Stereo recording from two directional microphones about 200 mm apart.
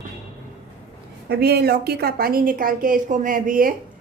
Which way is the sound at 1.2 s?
55° right (ahead or behind).